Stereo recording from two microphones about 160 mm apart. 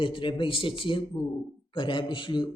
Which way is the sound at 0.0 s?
30° left (ahead or behind).